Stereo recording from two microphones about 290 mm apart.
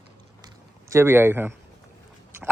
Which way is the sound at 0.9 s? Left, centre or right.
Centre.